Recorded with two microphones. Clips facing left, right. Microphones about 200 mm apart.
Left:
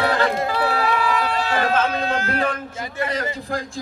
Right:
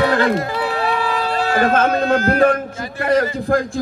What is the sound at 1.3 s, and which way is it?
Speech, 50° right (ahead or behind).